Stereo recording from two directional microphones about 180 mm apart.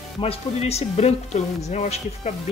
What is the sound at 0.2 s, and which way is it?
Speech, 35° left (ahead or behind).